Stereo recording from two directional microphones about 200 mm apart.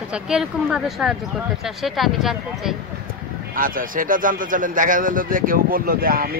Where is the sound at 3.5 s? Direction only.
45° right (ahead or behind).